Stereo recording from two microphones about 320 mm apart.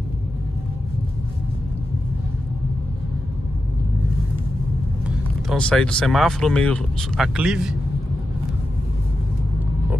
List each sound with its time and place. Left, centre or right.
5.0 s speech: centre